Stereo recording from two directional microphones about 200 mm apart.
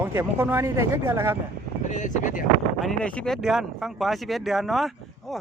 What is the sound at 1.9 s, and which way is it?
Speech, 40° left (ahead or behind).